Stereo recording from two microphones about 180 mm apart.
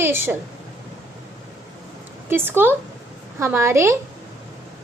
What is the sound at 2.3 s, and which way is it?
A woman's voice, 10° right (ahead or behind).